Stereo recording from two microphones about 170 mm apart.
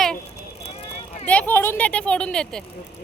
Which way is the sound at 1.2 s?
10° left (ahead or behind).